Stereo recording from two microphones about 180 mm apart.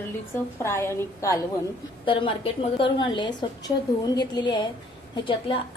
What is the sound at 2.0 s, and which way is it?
A woman's voice, 30° left (ahead or behind).